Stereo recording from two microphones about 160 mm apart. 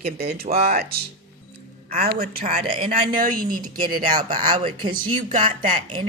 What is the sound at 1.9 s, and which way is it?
A woman's voice, 55° right (ahead or behind).